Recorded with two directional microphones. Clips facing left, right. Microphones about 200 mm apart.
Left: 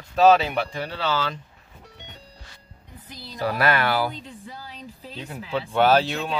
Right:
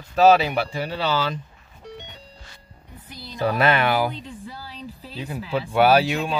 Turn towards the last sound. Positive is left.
turn(degrees=-10)  # may be behind; listen again after turning